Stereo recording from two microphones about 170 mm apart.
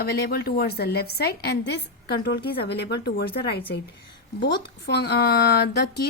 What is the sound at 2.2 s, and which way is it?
Speech, 70° left (ahead or behind).